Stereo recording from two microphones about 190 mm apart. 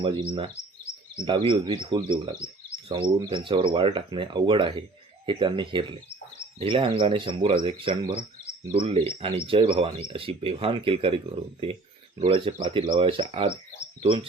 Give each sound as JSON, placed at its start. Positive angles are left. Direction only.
{"t": 0.0, "sound": "speech", "side_deg": -25}
{"t": 12.2, "sound": "speech", "side_deg": -25}